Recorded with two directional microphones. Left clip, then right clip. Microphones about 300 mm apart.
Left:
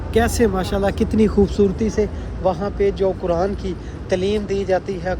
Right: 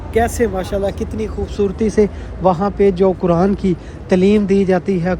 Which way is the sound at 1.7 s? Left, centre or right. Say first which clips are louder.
Right 6 dB; centre.